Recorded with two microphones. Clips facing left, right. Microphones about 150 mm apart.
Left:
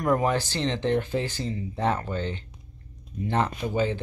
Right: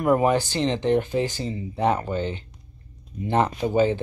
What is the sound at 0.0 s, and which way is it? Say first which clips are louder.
Speech: right 4 dB; 10° right (ahead or behind).